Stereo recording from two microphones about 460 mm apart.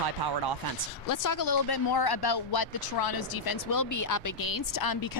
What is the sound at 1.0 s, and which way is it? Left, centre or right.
Speech, left.